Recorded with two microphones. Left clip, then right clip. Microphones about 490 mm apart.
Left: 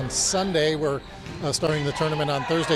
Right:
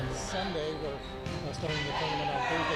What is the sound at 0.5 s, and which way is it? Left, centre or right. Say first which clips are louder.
Speech: left 12 dB; left.